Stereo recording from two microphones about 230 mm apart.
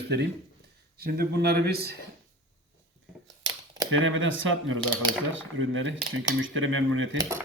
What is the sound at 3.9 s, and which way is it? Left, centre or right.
Speech, right.